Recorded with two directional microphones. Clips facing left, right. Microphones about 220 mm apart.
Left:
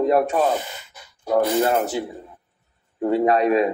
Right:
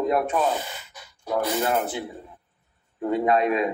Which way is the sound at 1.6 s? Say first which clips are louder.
Left 5 dB; 45° left (ahead or behind).